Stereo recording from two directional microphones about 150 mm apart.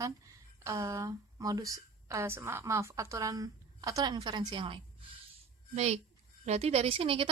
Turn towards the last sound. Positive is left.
turn(degrees=-40)  # may be behind; listen again after turning